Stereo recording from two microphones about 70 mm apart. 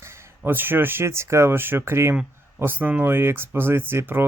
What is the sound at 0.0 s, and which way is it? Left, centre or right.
Speech, right.